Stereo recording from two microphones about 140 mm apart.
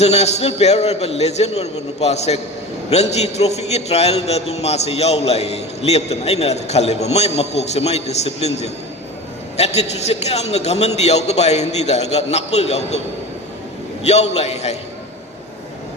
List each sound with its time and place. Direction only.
0.0 s a man's voice: 50° left (ahead or behind)
14.0 s a man's voice: 50° left (ahead or behind)